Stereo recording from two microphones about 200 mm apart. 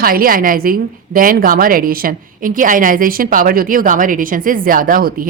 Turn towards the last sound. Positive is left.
turn(degrees=-45)  # may be behind; listen again after turning